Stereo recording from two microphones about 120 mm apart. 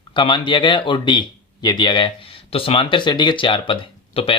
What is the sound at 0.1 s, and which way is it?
Speech, 40° left (ahead or behind).